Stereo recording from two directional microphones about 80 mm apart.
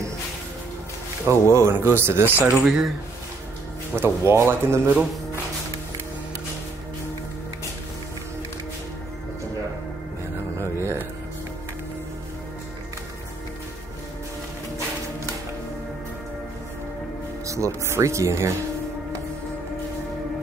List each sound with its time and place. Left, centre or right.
1.2 s speech: right
2.2 s speech: left
2.5 s speech: centre
3.9 s speech: right
10.6 s music: right
17.5 s music: right